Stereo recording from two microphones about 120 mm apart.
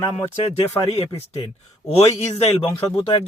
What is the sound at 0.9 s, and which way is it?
A man's voice, 60° left (ahead or behind).